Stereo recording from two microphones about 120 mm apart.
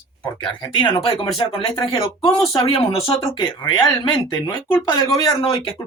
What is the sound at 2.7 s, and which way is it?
Speech, 50° left (ahead or behind).